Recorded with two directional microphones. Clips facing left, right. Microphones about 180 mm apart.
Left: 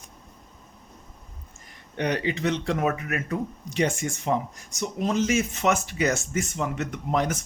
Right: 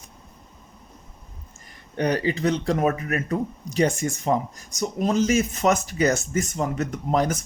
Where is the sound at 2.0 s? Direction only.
40° right (ahead or behind).